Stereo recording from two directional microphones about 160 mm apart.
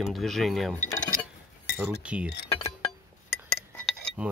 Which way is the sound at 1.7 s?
5° right (ahead or behind).